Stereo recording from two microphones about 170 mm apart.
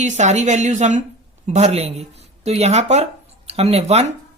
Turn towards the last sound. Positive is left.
turn(degrees=-40)  # may be behind; listen again after turning